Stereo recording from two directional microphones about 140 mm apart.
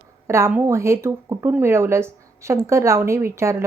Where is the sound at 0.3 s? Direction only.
20° right (ahead or behind).